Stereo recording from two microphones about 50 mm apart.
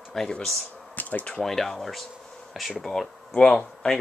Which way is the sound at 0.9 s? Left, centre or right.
Left.